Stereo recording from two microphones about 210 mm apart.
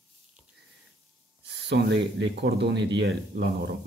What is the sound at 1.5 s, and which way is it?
Speech, 55° right (ahead or behind).